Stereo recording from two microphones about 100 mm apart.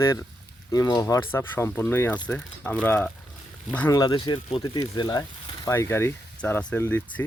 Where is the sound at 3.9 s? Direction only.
45° left (ahead or behind).